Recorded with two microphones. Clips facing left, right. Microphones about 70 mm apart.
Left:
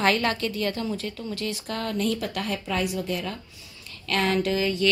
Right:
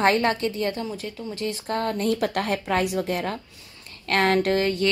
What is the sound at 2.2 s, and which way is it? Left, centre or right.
A woman's voice, right.